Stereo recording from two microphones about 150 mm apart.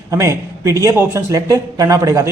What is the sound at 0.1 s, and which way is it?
A man's voice, 20° right (ahead or behind).